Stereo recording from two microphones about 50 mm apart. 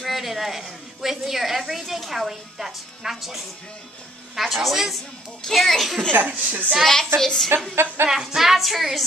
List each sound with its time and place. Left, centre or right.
0.0 s a woman's voice: centre
6.1 s a woman's voice: right
6.8 s a woman's voice: centre
7.7 s speech: right
8.1 s a woman's voice: centre